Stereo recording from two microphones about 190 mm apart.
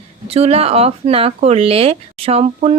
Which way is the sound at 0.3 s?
35° right (ahead or behind).